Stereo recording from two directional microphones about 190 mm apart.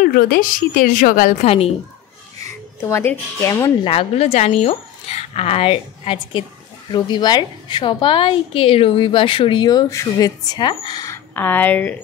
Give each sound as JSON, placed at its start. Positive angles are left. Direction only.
{"t": 0.0, "sound": "speech", "side_deg": 45}
{"t": 2.4, "sound": "speech", "side_deg": 15}
{"t": 3.8, "sound": "a woman's voice", "side_deg": 30}